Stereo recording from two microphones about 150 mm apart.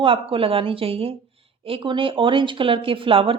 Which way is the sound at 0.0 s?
35° right (ahead or behind).